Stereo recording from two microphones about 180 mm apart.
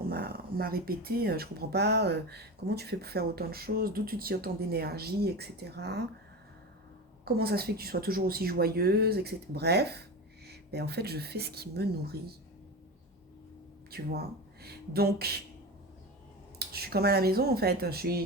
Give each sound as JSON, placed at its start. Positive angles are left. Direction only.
{"t": 0.0, "sound": "speech", "side_deg": -60}
{"t": 7.3, "sound": "speech", "side_deg": -60}
{"t": 13.9, "sound": "speech", "side_deg": -60}
{"t": 16.6, "sound": "speech", "side_deg": -60}